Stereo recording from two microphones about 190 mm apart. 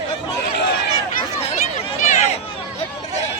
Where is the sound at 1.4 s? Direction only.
40° left (ahead or behind).